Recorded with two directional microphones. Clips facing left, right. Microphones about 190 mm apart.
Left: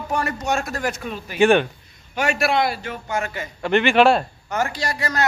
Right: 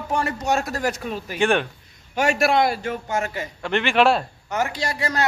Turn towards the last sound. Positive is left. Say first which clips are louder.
# even
turn(degrees=-25)  # may be behind; listen again after turning